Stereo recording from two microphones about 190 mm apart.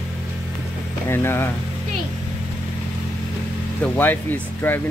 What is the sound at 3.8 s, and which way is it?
Speech, 10° left (ahead or behind).